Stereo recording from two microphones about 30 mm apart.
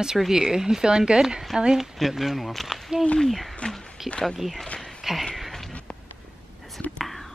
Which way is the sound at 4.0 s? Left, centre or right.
Centre.